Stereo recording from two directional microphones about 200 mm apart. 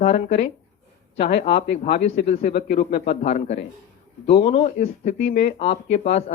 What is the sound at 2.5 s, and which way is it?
Speech, 35° left (ahead or behind).